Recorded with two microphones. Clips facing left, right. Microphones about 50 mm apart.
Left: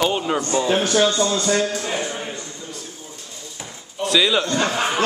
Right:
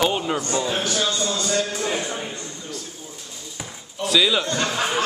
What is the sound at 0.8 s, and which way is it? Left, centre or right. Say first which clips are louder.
Speech: left 6 dB; left.